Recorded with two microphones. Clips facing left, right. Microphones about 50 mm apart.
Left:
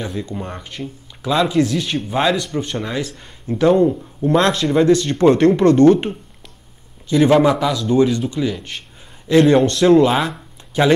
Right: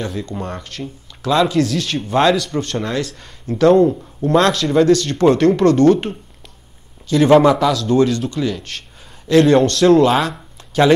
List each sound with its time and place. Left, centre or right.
0.0 s speech: centre
7.2 s speech: centre